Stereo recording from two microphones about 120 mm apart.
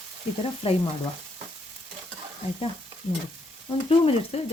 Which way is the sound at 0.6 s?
50° left (ahead or behind).